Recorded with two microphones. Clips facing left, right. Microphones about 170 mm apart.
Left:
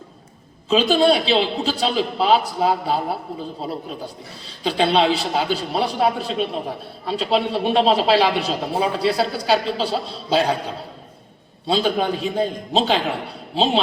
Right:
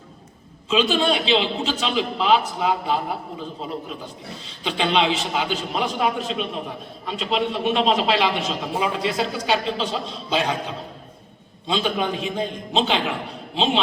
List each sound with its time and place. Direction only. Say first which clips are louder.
0.7 s a man's voice: left 4 dB; 35° left (ahead or behind)
11.6 s a man's voice: left 4 dB; 35° left (ahead or behind)